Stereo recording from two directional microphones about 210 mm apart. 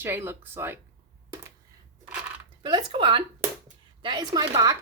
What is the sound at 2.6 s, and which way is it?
Speech, 20° right (ahead or behind).